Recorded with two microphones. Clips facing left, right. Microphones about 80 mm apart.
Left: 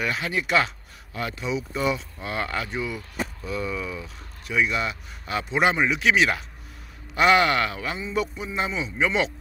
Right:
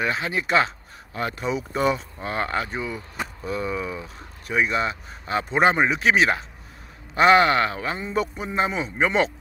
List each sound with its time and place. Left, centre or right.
0.0 s speech: right